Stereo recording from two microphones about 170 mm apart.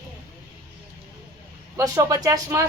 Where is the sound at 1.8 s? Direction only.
20° right (ahead or behind).